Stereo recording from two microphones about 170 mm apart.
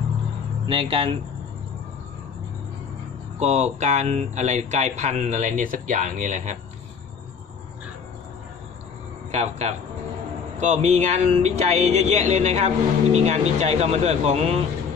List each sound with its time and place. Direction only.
0.7 s speech: 35° right (ahead or behind)
3.3 s speech: 40° right (ahead or behind)
9.3 s speech: 40° right (ahead or behind)